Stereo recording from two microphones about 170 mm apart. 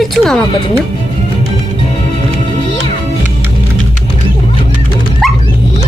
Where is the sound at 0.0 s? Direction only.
Centre (ahead or behind).